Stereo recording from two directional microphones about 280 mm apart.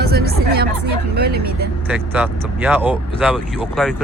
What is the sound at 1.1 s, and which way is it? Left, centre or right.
Speech, right.